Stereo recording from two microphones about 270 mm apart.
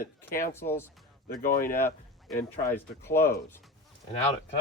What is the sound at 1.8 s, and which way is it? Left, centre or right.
Speech, centre.